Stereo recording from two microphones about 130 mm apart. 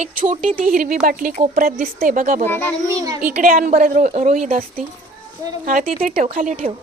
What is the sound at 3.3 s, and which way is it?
A woman's voice, 80° right.